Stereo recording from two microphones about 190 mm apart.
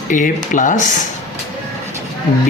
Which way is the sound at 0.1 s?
40° left (ahead or behind).